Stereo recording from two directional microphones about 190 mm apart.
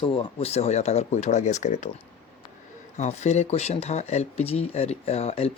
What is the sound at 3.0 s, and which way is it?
Speech, 35° left (ahead or behind).